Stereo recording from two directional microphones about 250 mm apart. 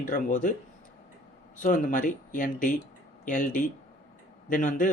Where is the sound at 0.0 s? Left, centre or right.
Left.